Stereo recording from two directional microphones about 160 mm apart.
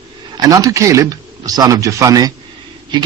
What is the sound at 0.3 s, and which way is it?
Speech, 20° right (ahead or behind).